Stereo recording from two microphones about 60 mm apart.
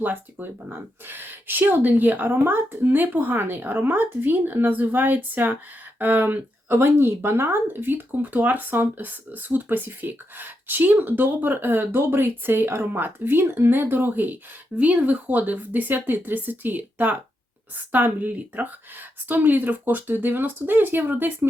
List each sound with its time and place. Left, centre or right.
0.0 s speech: right